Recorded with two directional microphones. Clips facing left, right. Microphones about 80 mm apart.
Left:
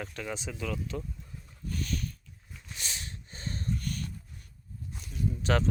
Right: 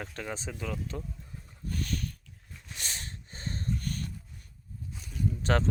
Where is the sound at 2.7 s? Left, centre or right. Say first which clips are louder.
Even; right.